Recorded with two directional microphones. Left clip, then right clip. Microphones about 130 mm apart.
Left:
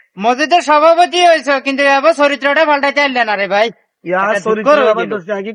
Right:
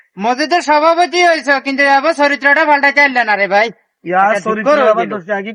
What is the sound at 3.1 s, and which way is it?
A man's voice, 25° left (ahead or behind).